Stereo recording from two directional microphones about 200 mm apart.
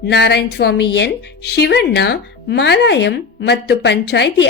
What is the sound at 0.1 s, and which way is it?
Speech, 55° left (ahead or behind).